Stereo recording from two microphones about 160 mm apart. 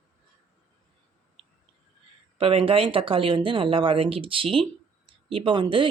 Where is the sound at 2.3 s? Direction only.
35° right (ahead or behind).